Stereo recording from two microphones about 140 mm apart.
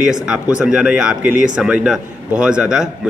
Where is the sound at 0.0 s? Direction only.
5° right (ahead or behind).